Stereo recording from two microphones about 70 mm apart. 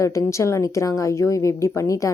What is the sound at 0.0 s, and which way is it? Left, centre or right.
Speech, left.